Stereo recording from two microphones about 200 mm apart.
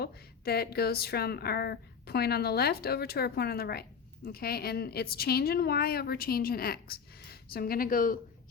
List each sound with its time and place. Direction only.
0.0 s speech: 50° left (ahead or behind)